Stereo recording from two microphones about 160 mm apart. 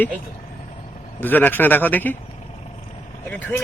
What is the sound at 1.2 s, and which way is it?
Speech, 10° left (ahead or behind).